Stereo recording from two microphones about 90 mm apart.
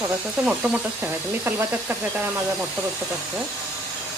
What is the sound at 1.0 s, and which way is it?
Speech, 25° right (ahead or behind).